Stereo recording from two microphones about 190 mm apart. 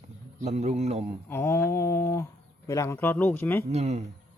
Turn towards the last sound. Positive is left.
turn(degrees=-35)  # may be behind; listen again after turning